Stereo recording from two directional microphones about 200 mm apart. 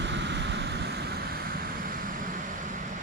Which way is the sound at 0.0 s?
60° right (ahead or behind).